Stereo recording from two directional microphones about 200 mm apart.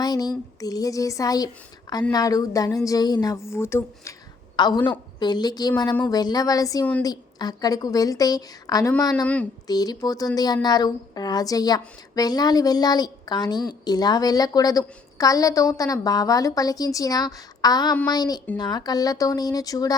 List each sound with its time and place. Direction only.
0.0 s a woman's voice: 20° left (ahead or behind)
9.2 s a woman's voice: 5° left (ahead or behind)
9.6 s speech: 20° left (ahead or behind)